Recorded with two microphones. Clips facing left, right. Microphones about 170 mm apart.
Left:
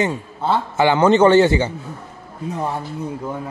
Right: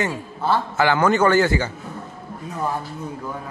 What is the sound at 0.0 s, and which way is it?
A man's voice, 20° left (ahead or behind).